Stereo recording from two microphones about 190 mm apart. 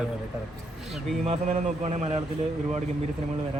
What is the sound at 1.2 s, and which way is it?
Speech, 35° right (ahead or behind).